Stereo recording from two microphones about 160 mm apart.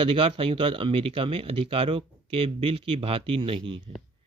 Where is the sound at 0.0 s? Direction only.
35° right (ahead or behind).